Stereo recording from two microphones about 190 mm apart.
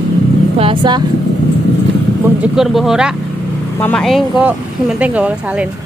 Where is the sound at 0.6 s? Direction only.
25° right (ahead or behind).